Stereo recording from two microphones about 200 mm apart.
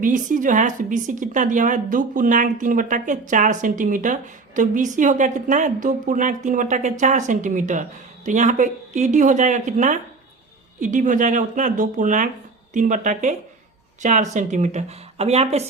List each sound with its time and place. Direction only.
0.0 s a woman's voice: 40° right (ahead or behind)